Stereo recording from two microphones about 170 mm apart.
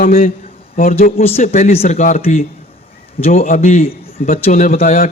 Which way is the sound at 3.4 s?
50° left (ahead or behind).